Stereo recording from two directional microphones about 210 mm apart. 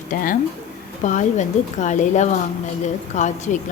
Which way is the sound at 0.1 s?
40° left (ahead or behind).